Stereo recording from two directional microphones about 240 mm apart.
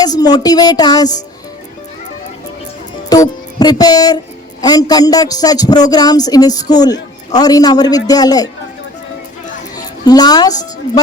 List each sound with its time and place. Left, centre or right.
0.0 s a man's voice: centre
3.1 s music: centre
4.6 s a man's voice: centre
9.7 s a woman's voice: centre